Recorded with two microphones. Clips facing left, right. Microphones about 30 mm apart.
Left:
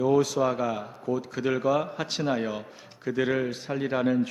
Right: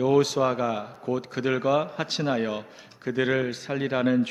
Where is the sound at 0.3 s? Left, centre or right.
Centre.